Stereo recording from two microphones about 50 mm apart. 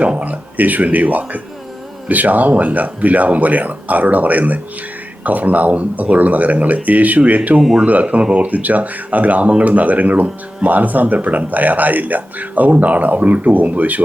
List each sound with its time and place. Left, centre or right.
0.0 s speech: right
7.6 s speech: centre
7.9 s speech: right